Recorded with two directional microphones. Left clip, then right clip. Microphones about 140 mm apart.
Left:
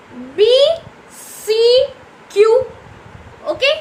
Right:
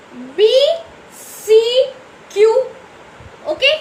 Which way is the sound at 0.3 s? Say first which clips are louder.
Left 1 dB; 40° left (ahead or behind).